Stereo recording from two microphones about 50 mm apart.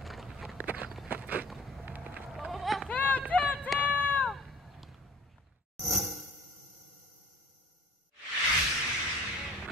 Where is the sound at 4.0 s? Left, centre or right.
Left.